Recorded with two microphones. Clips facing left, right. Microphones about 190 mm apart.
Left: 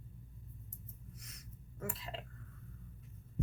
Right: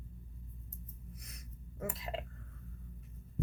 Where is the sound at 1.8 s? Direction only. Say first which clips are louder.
Right 4 dB; 15° right (ahead or behind).